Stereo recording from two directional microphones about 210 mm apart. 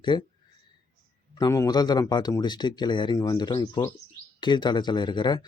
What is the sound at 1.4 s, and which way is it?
Speech, 15° left (ahead or behind).